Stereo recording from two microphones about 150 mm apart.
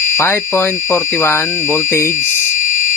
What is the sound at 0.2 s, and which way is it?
Speech, 15° left (ahead or behind).